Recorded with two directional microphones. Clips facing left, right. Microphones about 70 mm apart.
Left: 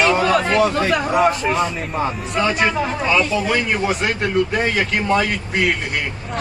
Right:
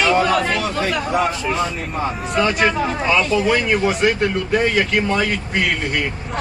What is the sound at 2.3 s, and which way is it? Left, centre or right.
Speech, centre.